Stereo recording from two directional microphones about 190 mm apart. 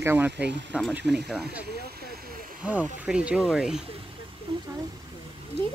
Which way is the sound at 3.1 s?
5° right (ahead or behind).